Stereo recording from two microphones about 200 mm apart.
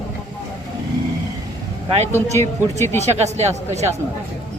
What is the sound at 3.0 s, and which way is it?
Speech, 35° right (ahead or behind).